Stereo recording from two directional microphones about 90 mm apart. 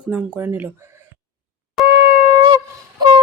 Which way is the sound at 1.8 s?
Centre (ahead or behind).